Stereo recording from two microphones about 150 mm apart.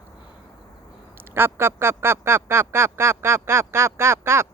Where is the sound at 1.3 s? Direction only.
15° right (ahead or behind).